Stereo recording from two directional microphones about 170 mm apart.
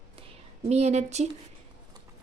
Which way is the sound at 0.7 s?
40° right (ahead or behind).